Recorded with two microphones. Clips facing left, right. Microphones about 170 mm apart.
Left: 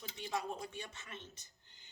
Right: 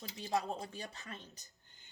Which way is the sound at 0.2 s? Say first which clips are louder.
Right 4 dB; 35° right (ahead or behind).